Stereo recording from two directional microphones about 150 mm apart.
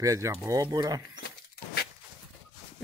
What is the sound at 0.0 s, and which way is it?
Speech, 20° right (ahead or behind).